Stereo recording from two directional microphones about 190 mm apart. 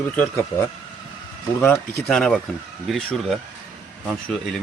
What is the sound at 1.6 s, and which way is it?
Speech, 10° left (ahead or behind).